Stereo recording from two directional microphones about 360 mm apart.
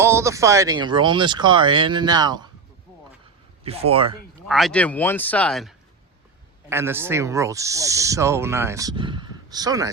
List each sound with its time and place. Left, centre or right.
0.0 s owl: centre
3.6 s owl: centre
4.4 s speech: centre
6.7 s owl: centre